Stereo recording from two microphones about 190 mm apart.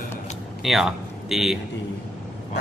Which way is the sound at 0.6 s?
Centre (ahead or behind).